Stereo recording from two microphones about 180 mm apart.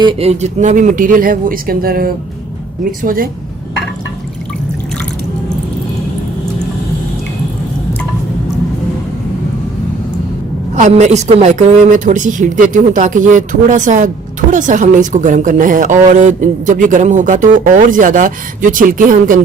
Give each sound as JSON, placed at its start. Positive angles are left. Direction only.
{"t": 0.0, "sound": "a woman's voice", "side_deg": -35}
{"t": 10.8, "sound": "a woman's voice", "side_deg": -40}